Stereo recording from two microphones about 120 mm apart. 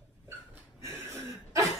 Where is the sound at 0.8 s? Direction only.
20° right (ahead or behind).